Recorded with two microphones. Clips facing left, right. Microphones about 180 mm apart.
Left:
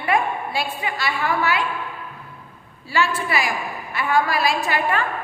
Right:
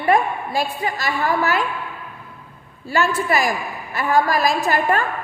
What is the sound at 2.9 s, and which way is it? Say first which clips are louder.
A woman's voice: right 3 dB; 45° right (ahead or behind).